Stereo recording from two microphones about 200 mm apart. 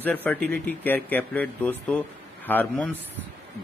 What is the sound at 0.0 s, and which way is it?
Speech, 10° left (ahead or behind).